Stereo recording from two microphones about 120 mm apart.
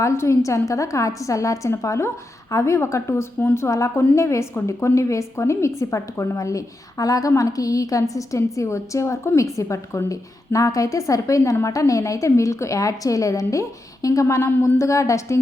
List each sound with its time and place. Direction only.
0.0 s a woman's voice: 25° left (ahead or behind)